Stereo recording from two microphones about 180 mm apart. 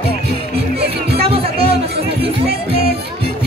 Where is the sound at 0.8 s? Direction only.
60° right (ahead or behind).